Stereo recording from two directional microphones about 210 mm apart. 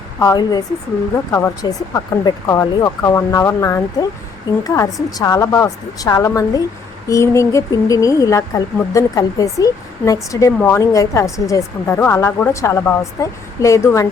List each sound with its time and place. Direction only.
0.2 s speech: 15° left (ahead or behind)